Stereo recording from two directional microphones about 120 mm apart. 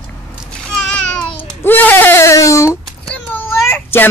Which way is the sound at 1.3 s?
15° left (ahead or behind).